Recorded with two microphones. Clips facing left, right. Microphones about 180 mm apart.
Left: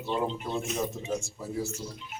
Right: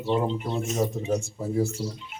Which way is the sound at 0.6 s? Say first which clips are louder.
Right 5 dB; 40° right (ahead or behind).